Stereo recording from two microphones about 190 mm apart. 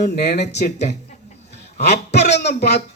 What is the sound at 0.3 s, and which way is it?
Speech, 60° left (ahead or behind).